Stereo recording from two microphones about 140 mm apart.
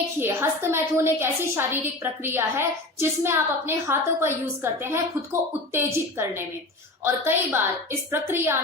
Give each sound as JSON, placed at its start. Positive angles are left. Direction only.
{"t": 0.2, "sound": "a woman's voice", "side_deg": -15}